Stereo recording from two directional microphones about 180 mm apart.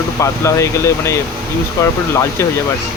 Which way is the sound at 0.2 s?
15° left (ahead or behind).